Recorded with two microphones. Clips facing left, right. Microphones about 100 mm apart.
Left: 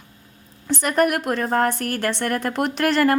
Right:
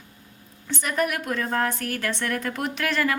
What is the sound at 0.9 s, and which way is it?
A woman's voice, 55° left (ahead or behind).